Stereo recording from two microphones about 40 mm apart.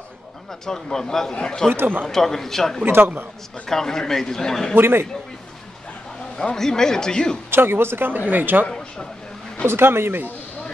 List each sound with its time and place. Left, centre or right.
0.5 s a man's voice: centre
1.7 s speech: right
2.0 s speech: centre
2.8 s speech: right
3.6 s speech: centre
4.7 s speech: right
6.5 s speech: centre
7.5 s speech: right
8.1 s speech: right
9.7 s speech: right